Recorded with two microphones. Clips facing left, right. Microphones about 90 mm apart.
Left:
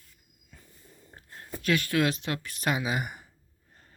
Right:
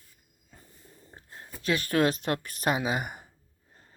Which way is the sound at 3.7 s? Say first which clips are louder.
Even; 20° right (ahead or behind).